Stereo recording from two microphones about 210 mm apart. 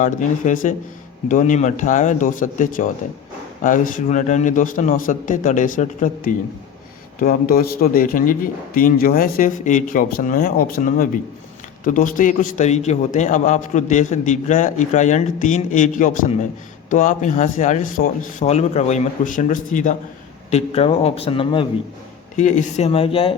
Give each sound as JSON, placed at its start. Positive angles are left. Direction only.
{"t": 0.0, "sound": "a man's voice", "side_deg": 35}
{"t": 22.4, "sound": "speech", "side_deg": 35}